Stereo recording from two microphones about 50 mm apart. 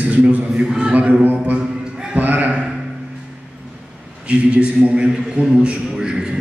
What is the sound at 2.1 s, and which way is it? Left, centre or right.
Speech, right.